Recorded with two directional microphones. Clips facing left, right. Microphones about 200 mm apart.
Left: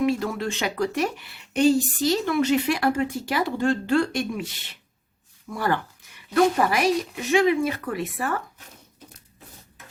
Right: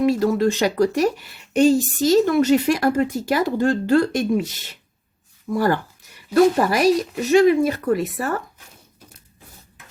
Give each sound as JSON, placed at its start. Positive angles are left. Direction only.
{"t": 0.0, "sound": "a woman's voice", "side_deg": -40}